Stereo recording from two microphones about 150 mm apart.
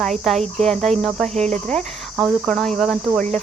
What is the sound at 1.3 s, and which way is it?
Cricket, 50° right (ahead or behind).